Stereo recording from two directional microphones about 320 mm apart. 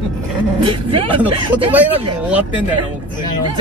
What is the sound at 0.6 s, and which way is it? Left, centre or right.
Speech, centre.